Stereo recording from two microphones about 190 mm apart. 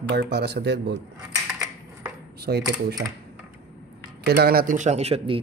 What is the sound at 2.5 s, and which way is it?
Speech, 60° right (ahead or behind).